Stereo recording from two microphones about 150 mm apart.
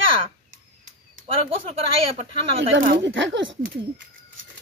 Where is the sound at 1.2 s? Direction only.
40° right (ahead or behind).